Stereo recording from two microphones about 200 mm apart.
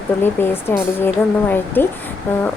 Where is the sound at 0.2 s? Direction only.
10° left (ahead or behind).